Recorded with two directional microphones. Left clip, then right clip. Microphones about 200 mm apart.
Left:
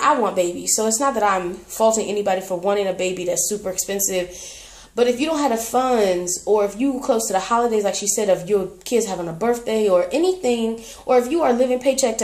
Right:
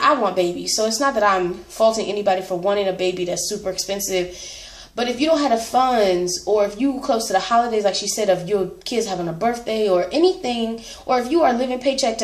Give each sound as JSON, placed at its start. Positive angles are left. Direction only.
{"t": 0.0, "sound": "a woman's voice", "side_deg": 45}